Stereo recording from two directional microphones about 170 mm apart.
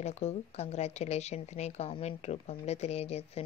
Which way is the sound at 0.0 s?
40° left (ahead or behind).